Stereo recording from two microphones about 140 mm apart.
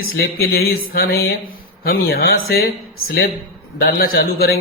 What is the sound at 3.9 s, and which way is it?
Speech, 90° left.